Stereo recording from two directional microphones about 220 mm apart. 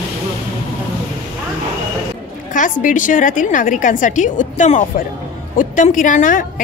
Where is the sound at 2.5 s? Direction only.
35° left (ahead or behind).